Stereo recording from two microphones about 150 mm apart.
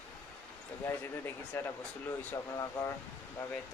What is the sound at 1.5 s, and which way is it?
A man's voice, 15° left (ahead or behind).